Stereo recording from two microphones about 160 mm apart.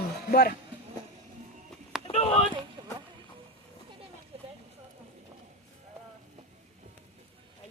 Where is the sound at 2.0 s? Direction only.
40° left (ahead or behind).